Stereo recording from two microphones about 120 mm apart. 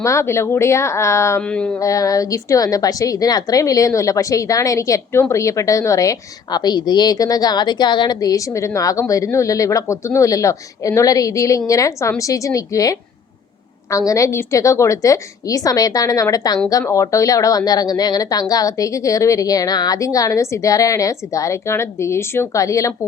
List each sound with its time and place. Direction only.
0.0 s a woman's voice: 25° left (ahead or behind)
1.4 s a sound: 10° left (ahead or behind)
1.8 s a woman's voice: 30° left (ahead or behind)